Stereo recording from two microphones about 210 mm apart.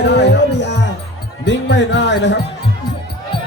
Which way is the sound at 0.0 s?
55° left (ahead or behind).